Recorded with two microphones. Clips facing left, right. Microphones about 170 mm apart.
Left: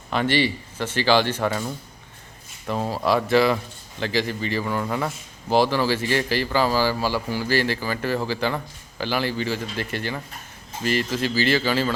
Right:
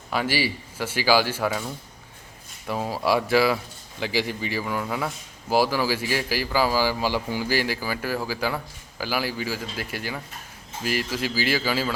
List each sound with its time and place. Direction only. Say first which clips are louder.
0.1 s speech: left 3 dB; 5° right (ahead or behind)